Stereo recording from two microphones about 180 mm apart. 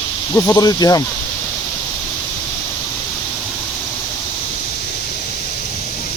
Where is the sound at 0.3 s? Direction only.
20° left (ahead or behind).